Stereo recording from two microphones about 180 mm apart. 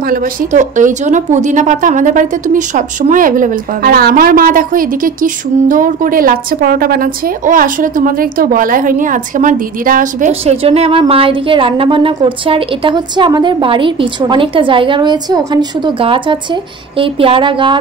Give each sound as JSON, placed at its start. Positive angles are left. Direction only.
{"t": 0.1, "sound": "speech", "side_deg": -45}
{"t": 10.4, "sound": "a woman's voice", "side_deg": -35}